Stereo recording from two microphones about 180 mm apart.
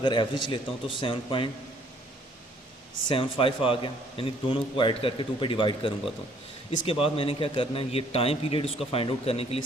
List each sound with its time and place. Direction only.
0.0 s a man's voice: 25° left (ahead or behind)
3.1 s a man's voice: 30° left (ahead or behind)
7.0 s a man's voice: 30° left (ahead or behind)